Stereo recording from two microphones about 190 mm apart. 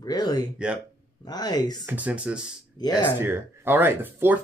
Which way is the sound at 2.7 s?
20° left (ahead or behind).